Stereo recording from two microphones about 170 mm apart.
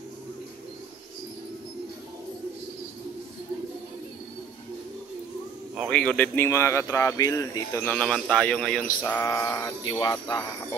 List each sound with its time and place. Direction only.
5.9 s speech: 5° left (ahead or behind)
8.8 s speech: 15° left (ahead or behind)
10.1 s speech: 5° left (ahead or behind)